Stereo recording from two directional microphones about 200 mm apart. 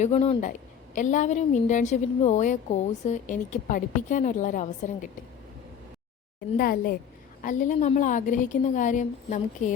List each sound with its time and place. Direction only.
0.0 s a woman's voice: 30° left (ahead or behind)
6.6 s a woman's voice: 45° left (ahead or behind)